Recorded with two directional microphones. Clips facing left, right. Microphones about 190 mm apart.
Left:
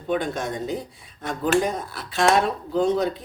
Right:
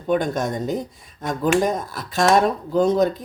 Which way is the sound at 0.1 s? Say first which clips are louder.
Right 4 dB; 45° right (ahead or behind).